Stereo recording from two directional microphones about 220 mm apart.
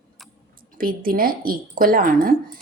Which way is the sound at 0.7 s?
40° right (ahead or behind).